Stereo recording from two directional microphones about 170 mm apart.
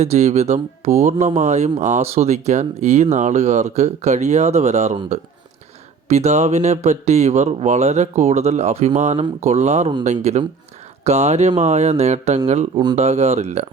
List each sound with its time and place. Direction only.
0.0 s speech: 40° right (ahead or behind)